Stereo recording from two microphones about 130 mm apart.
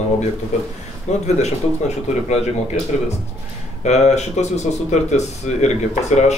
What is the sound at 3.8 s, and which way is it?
Speech, 60° left (ahead or behind).